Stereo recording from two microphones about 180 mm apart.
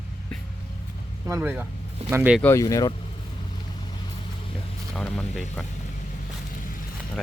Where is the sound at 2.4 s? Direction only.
15° left (ahead or behind).